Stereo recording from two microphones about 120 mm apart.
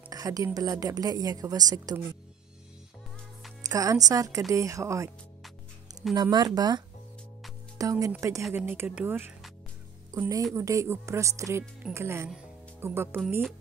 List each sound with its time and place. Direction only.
0.1 s music: 30° right (ahead or behind)
0.6 s a woman's voice: 30° right (ahead or behind)
3.6 s speech: 30° right (ahead or behind)
6.3 s a woman's voice: 35° right (ahead or behind); by 13.2 s 20° right (ahead or behind)